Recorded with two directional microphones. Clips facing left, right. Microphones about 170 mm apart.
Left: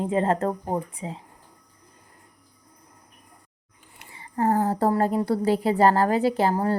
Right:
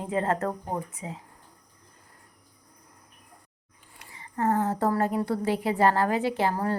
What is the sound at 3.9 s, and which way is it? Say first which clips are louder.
A woman's voice: left 4 dB; 30° left (ahead or behind).